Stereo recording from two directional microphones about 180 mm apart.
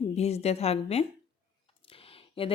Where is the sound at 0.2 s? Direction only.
35° left (ahead or behind).